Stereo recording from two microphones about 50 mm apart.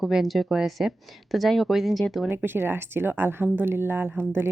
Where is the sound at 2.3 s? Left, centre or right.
Right.